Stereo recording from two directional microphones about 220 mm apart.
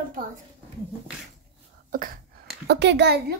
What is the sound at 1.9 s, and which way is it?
A woman's voice, 40° right (ahead or behind).